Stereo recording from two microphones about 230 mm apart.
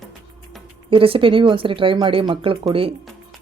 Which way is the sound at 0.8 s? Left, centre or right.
Right.